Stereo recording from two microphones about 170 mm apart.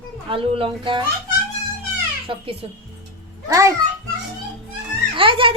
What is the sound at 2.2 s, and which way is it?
Speech, 30° right (ahead or behind).